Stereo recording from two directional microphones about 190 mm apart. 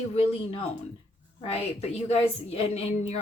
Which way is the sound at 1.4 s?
30° left (ahead or behind).